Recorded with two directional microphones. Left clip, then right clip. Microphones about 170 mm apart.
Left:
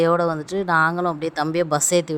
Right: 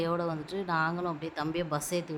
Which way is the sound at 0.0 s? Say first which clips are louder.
Left 13 dB; 45° left (ahead or behind).